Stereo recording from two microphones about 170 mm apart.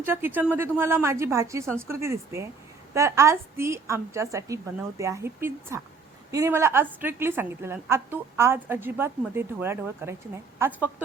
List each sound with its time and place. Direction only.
0.0 s a woman's voice: 10° right (ahead or behind)